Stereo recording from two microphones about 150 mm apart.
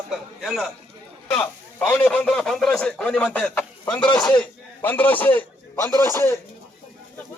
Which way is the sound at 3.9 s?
30° left (ahead or behind).